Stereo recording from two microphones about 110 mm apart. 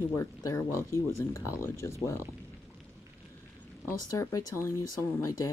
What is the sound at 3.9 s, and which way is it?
Speech, 30° left (ahead or behind).